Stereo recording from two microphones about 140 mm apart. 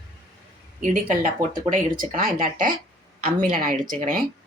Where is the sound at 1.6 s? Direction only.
75° right (ahead or behind).